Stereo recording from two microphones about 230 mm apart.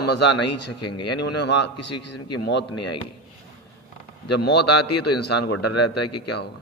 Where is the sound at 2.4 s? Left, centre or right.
Left.